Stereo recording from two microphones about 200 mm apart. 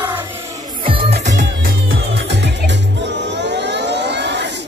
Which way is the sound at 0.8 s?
30° right (ahead or behind).